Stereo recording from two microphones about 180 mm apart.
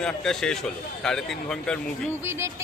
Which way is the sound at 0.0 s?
5° left (ahead or behind).